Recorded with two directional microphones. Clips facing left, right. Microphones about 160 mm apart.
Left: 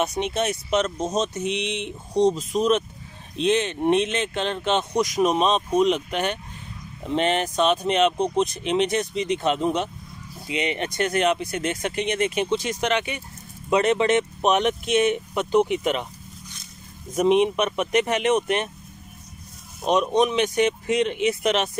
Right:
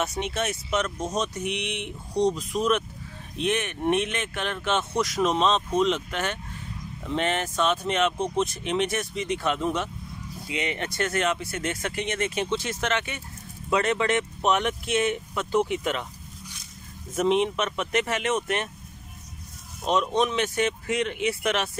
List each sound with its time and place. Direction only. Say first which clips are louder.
0.0 s speech: left 4 dB; 20° left (ahead or behind)
17.1 s speech: left 4 dB; 15° left (ahead or behind)
19.8 s speech: left 4 dB; 20° left (ahead or behind)